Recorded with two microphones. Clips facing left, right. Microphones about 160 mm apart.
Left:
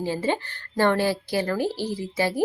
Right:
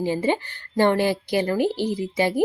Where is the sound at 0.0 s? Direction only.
15° right (ahead or behind).